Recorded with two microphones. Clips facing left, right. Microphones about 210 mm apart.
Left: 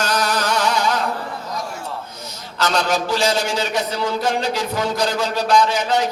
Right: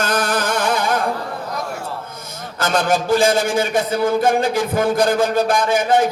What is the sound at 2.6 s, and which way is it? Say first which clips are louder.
A man's voice: right 2 dB; 50° right (ahead or behind).